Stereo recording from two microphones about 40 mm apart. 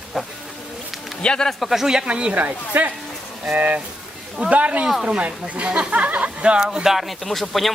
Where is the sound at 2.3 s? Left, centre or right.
Right.